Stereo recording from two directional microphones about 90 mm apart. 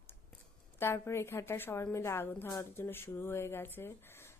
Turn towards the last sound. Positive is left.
turn(degrees=25)  # may be behind; listen again after turning